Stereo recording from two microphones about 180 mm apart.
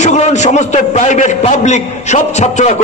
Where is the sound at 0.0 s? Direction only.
40° left (ahead or behind).